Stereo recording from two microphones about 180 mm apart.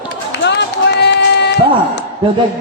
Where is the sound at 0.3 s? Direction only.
75° left (ahead or behind).